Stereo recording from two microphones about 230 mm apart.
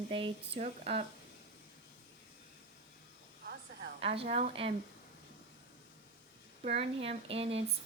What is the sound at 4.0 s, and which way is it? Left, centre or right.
Speech, right.